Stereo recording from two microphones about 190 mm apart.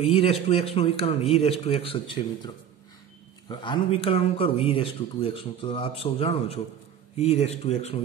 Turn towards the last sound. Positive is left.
turn(degrees=35)  # may be behind; listen again after turning